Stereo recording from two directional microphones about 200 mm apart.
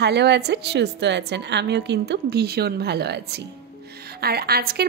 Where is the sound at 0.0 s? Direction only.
55° right (ahead or behind).